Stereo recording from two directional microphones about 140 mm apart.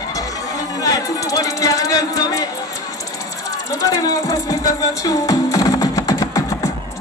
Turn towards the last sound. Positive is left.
turn(degrees=25)  # may be behind; listen again after turning